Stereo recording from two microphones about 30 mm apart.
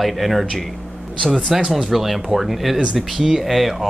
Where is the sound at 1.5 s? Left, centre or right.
Centre.